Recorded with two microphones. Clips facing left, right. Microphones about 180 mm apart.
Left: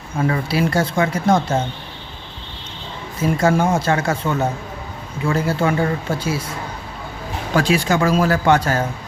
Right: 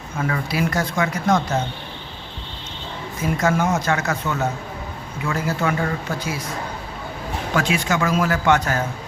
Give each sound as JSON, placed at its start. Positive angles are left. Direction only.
{"t": 0.2, "sound": "speech", "side_deg": 30}
{"t": 3.3, "sound": "speech", "side_deg": 30}
{"t": 7.5, "sound": "speech", "side_deg": 35}